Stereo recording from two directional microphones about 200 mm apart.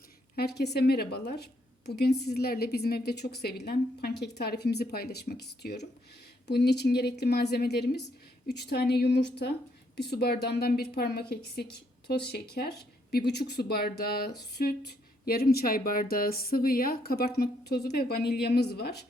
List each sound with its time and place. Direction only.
0.3 s a woman's voice: 55° left (ahead or behind)